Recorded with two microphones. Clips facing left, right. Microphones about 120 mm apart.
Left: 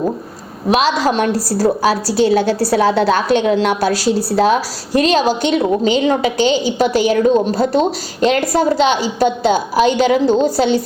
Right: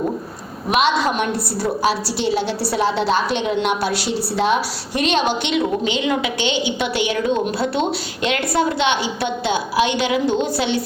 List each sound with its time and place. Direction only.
0.7 s a woman's voice: 35° left (ahead or behind)